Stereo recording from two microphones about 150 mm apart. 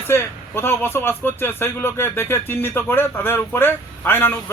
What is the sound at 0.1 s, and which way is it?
Speech, 15° left (ahead or behind).